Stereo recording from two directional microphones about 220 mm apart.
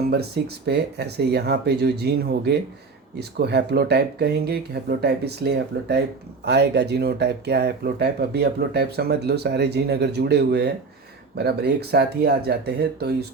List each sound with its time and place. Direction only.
0.1 s speech: 45° right (ahead or behind)